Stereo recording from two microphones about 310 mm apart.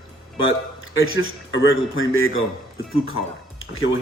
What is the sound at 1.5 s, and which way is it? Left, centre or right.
Speech, left.